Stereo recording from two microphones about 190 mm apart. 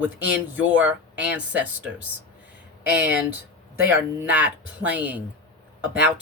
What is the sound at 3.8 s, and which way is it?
Speech, 10° right (ahead or behind).